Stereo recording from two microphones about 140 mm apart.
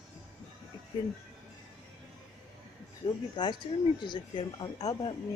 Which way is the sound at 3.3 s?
35° left (ahead or behind).